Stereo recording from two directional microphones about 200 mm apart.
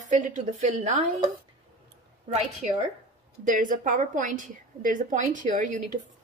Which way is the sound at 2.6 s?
40° right (ahead or behind).